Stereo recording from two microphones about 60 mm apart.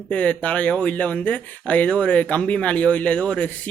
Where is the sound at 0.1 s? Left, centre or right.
Left.